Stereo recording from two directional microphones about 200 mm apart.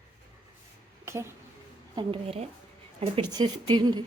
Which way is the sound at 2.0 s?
30° right (ahead or behind).